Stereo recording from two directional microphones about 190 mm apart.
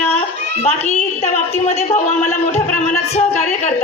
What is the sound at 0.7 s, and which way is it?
A woman's voice, 35° left (ahead or behind).